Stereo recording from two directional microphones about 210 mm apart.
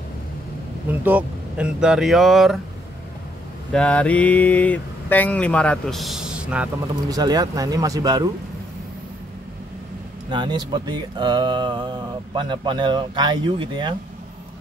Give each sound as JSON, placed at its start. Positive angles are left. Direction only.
{"t": 1.0, "sound": "speech", "side_deg": -5}
{"t": 3.7, "sound": "speech", "side_deg": 5}
{"t": 7.1, "sound": "speech", "side_deg": -20}
{"t": 10.3, "sound": "speech", "side_deg": -20}